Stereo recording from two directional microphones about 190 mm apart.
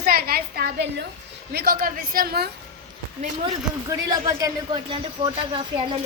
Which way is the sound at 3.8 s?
15° right (ahead or behind).